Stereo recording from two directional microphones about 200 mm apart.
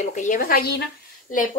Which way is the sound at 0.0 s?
40° left (ahead or behind).